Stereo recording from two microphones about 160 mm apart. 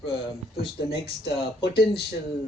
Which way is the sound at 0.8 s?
90° left.